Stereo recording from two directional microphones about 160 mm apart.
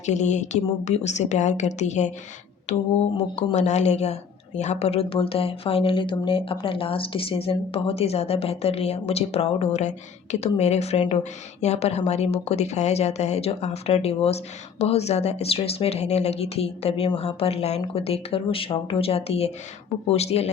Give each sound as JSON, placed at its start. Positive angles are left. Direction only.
{"t": 0.0, "sound": "a woman's voice", "side_deg": 45}